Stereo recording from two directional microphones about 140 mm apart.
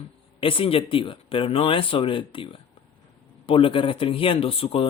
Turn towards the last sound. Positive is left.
turn(degrees=45)  # may be behind; listen again after turning